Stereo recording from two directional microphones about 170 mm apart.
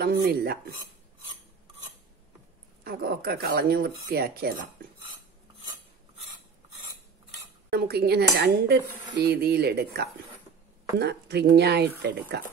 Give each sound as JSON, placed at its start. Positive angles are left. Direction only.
{"t": 0.0, "sound": "speech", "side_deg": -65}
{"t": 2.8, "sound": "speech", "side_deg": -65}
{"t": 7.7, "sound": "dishes", "side_deg": -70}